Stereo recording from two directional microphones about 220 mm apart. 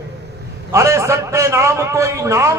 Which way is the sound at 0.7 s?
15° right (ahead or behind).